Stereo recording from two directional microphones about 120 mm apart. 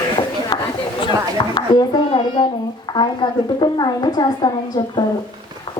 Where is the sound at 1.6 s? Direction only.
40° left (ahead or behind).